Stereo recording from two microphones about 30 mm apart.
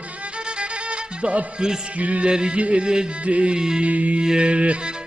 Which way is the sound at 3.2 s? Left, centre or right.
Right.